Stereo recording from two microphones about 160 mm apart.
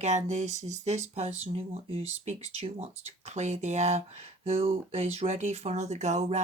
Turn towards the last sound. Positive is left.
turn(degrees=-45)  # may be behind; listen again after turning